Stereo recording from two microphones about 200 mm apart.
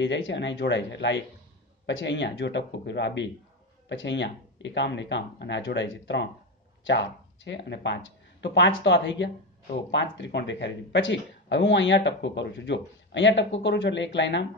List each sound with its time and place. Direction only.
0.0 s speech: 65° left (ahead or behind)